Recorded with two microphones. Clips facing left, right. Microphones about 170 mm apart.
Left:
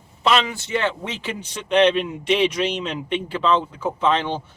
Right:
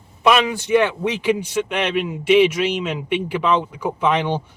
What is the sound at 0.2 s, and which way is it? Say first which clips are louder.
Speech: right 4 dB; 15° right (ahead or behind).